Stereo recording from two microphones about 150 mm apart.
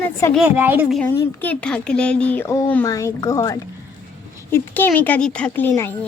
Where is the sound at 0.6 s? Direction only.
10° right (ahead or behind).